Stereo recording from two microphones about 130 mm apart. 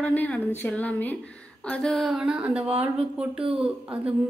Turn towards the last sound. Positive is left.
turn(degrees=-10)  # may be behind; listen again after turning